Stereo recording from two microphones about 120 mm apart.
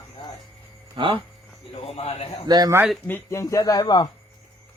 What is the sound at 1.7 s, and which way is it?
Speech, 55° left (ahead or behind).